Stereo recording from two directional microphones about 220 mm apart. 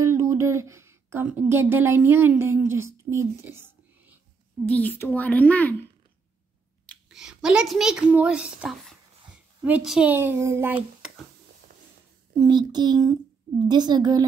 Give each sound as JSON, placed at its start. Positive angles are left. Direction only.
{"t": 0.0, "sound": "speech", "side_deg": -15}
{"t": 4.6, "sound": "a woman's voice", "side_deg": 5}
{"t": 6.9, "sound": "a child's voice", "side_deg": -5}
{"t": 12.4, "sound": "a child's voice", "side_deg": -20}